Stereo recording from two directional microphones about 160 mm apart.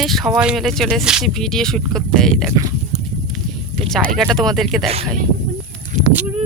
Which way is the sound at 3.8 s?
5° left (ahead or behind).